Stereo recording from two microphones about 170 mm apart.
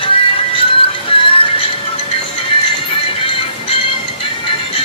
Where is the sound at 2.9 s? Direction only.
30° left (ahead or behind).